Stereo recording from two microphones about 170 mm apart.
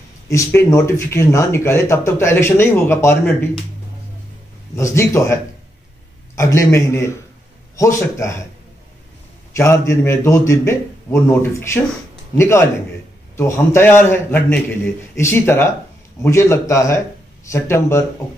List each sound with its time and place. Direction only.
0.3 s speech: 15° left (ahead or behind)
4.7 s speech: 15° left (ahead or behind)
9.6 s speech: 15° left (ahead or behind)